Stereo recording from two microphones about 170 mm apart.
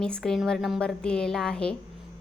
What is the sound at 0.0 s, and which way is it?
A woman's voice, 5° left (ahead or behind).